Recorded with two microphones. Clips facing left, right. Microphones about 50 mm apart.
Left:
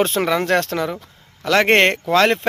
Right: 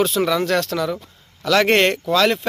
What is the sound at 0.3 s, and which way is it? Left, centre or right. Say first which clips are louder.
Speech: left 1 dB; left.